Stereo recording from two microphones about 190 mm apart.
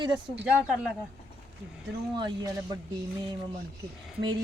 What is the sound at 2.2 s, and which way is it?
Speech, 20° right (ahead or behind).